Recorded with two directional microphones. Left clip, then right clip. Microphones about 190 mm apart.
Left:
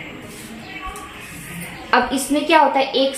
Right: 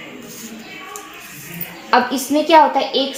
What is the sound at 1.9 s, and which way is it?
Speech, 25° right (ahead or behind).